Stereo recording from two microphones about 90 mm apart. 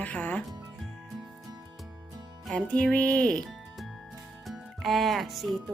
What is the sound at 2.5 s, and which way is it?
Speech, 10° left (ahead or behind).